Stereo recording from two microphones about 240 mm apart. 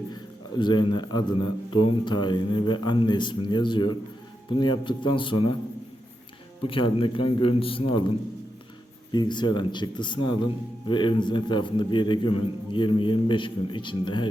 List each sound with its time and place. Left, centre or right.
0.5 s speech: centre
6.7 s speech: left
9.1 s speech: centre